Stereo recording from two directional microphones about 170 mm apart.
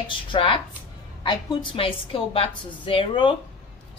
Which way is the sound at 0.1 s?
30° left (ahead or behind).